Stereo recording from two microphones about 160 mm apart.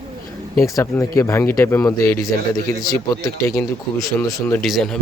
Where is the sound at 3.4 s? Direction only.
20° left (ahead or behind).